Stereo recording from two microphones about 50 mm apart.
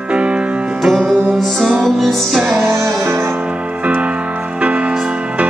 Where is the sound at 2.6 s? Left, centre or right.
Right.